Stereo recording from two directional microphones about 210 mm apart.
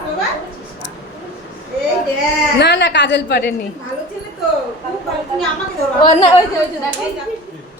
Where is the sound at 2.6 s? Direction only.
55° left (ahead or behind).